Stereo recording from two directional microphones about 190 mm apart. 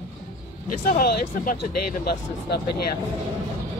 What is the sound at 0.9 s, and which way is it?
Speech, 45° left (ahead or behind).